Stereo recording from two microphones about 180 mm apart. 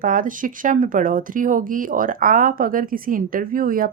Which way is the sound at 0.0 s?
50° right (ahead or behind).